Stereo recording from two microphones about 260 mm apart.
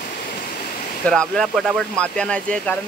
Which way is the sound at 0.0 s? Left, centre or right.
Left.